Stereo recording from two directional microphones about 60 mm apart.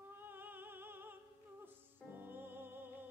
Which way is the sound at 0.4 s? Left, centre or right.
Right.